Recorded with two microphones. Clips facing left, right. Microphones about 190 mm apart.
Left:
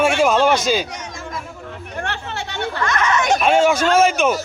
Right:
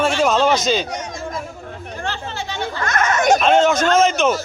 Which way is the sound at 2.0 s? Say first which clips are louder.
Even; 65° left (ahead or behind).